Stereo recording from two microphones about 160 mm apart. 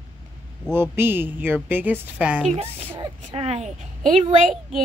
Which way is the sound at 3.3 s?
40° right (ahead or behind).